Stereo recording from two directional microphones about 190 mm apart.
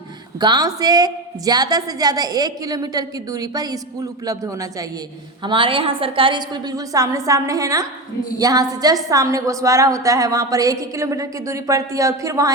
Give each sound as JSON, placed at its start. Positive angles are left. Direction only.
{"t": 0.3, "sound": "a woman's voice", "side_deg": -20}